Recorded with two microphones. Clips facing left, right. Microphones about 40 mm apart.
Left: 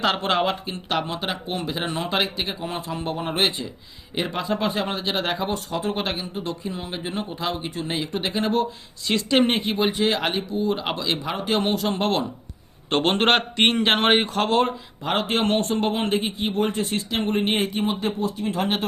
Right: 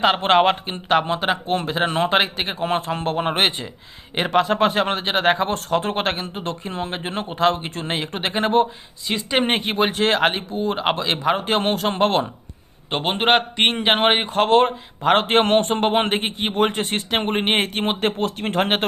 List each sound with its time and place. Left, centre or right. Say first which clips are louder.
0.2 s a man's voice: right 6 dB; right
2.6 s a man's voice: right 7 dB; right
9.0 s a man's voice: left 1 dB; centre
9.4 s a man's voice: right 1 dB; right
12.9 s a man's voice: right 1 dB; centre
14.3 s a man's voice: right 5 dB; right